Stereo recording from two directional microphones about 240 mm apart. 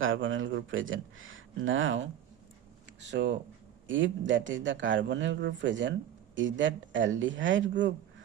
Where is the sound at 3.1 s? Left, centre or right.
Right.